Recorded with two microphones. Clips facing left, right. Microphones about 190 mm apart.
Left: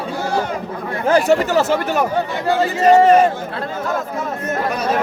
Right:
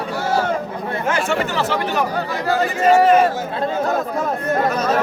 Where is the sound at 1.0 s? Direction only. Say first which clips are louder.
Left 7 dB; 35° left (ahead or behind).